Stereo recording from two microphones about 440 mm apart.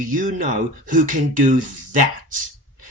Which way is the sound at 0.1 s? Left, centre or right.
Centre.